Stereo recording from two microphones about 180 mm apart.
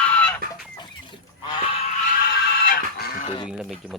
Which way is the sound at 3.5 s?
5° right (ahead or behind).